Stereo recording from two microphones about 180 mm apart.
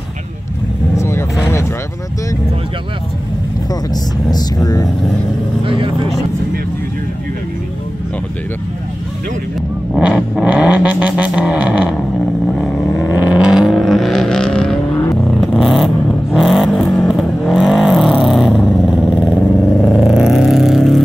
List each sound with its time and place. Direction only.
0.9 s vehicle: 15° left (ahead or behind)
4.3 s speech: 20° left (ahead or behind)
9.9 s vehicle: centre (ahead or behind)
13.1 s vehicle: 10° right (ahead or behind)
19.8 s vehicle: 5° right (ahead or behind)